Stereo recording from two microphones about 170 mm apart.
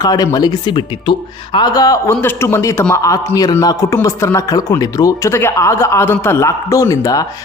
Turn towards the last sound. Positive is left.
turn(degrees=20)  # may be behind; listen again after turning